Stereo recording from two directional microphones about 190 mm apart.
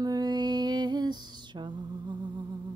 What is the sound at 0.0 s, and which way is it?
Lullaby, 20° right (ahead or behind).